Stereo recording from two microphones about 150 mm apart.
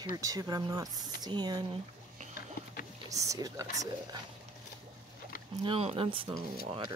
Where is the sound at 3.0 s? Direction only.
20° right (ahead or behind).